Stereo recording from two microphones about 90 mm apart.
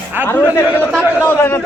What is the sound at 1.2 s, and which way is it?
Speech, 25° left (ahead or behind).